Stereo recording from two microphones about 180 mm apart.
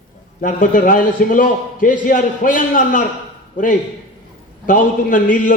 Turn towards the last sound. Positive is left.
turn(degrees=50)  # may be behind; listen again after turning